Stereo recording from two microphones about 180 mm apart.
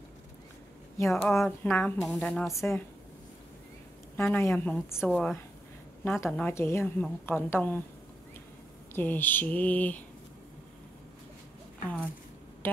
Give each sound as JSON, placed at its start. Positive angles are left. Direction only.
{"t": 1.1, "sound": "a woman's voice", "side_deg": 5}
{"t": 2.0, "sound": "speech", "side_deg": 0}
{"t": 2.5, "sound": "a woman's voice", "side_deg": 15}
{"t": 4.4, "sound": "a woman's voice", "side_deg": 10}
{"t": 8.9, "sound": "a woman's voice", "side_deg": 10}